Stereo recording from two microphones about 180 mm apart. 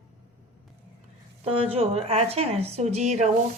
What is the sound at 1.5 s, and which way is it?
A woman's voice, 30° right (ahead or behind).